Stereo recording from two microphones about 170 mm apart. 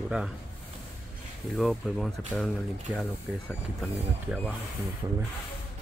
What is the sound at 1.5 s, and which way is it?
Speech, centre (ahead or behind).